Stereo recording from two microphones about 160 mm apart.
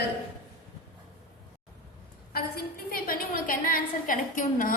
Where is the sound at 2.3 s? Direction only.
65° left (ahead or behind).